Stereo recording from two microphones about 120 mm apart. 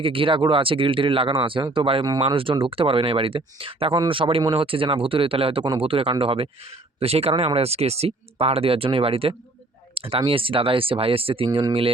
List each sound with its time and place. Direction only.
0.0 s speech: 50° right (ahead or behind)